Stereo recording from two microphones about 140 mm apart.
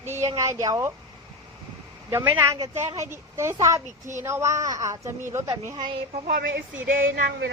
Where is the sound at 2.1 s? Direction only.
20° right (ahead or behind).